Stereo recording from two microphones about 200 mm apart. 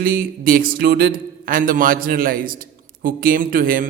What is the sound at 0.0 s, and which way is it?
A man's voice, 45° right (ahead or behind).